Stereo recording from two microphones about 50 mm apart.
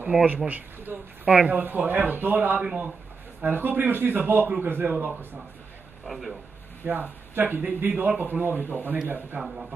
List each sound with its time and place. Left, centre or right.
0.1 s speech: right
0.5 s a sound: right
1.5 s a man's voice: right
2.6 s speech: right
3.3 s a man's voice: right
6.0 s a man's voice: centre
6.8 s a man's voice: right
9.4 s speech: centre